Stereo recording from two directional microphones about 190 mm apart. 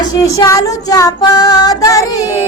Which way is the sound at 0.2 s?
20° left (ahead or behind).